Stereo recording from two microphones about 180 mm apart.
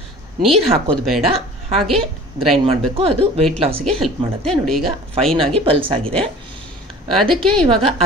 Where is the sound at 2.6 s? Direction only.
30° right (ahead or behind).